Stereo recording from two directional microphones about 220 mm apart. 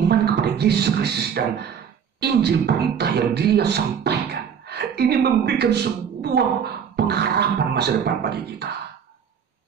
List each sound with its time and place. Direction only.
0.1 s speech: 50° right (ahead or behind)